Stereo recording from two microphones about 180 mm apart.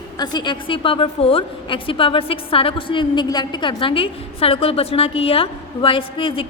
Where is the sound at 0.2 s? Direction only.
25° left (ahead or behind).